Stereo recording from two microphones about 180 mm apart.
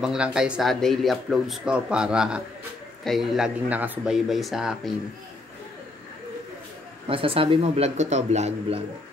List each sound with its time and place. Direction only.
0.0 s speech: 5° right (ahead or behind)
7.1 s speech: 30° right (ahead or behind)